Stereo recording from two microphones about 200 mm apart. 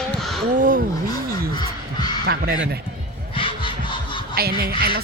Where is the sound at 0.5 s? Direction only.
40° right (ahead or behind).